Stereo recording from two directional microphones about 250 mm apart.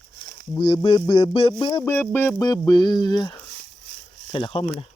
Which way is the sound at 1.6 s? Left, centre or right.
Centre.